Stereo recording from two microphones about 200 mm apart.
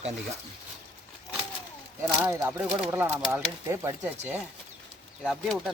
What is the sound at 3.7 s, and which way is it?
Speech, 10° right (ahead or behind).